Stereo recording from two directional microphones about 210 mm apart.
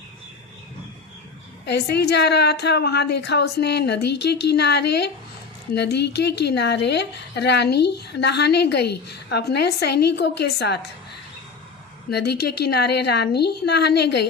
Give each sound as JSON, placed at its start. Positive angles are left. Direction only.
{"t": 1.6, "sound": "a woman's voice", "side_deg": 50}
{"t": 12.1, "sound": "a woman's voice", "side_deg": 50}